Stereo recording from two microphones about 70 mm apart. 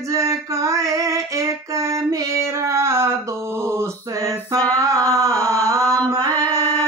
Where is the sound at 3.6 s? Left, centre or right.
Right.